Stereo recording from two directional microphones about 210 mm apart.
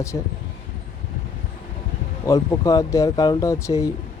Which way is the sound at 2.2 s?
15° left (ahead or behind).